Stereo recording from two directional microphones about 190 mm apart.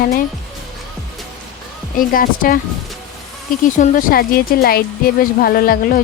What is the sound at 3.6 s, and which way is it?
Speech, 45° left (ahead or behind).